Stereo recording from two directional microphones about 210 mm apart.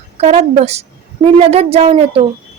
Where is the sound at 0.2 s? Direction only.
30° right (ahead or behind).